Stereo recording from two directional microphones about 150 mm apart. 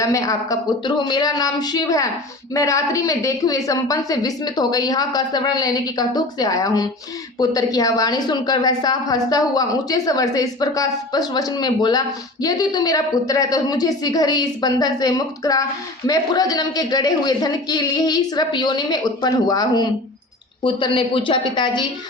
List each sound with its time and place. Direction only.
0.0 s a woman's voice: 20° left (ahead or behind)